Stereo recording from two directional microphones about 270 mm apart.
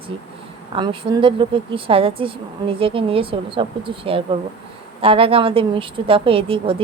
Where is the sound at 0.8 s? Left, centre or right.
Centre.